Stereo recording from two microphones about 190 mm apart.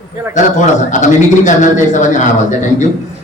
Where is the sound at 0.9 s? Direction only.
40° left (ahead or behind).